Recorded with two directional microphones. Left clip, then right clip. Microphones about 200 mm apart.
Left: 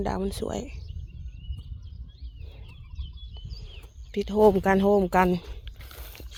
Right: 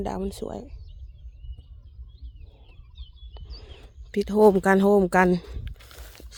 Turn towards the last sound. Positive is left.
turn(degrees=0)  # may be behind; listen again after turning